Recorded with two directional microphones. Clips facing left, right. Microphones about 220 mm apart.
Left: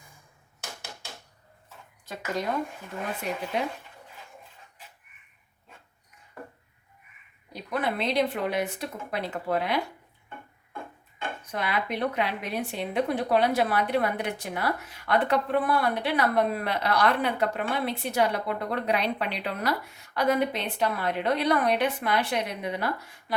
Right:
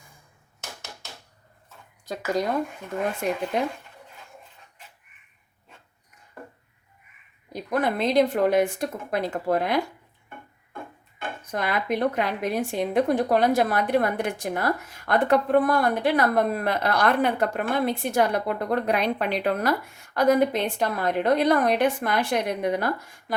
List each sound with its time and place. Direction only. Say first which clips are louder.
3.2 s a woman's voice: right 5 dB; 45° right (ahead or behind)
7.5 s a woman's voice: right 4 dB; 45° right (ahead or behind)
11.5 s a woman's voice: right 4 dB; 45° right (ahead or behind)